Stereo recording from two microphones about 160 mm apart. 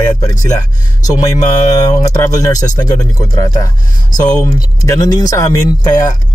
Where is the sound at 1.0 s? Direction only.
20° left (ahead or behind).